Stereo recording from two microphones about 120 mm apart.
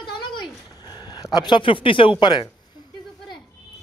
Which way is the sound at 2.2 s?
40° left (ahead or behind).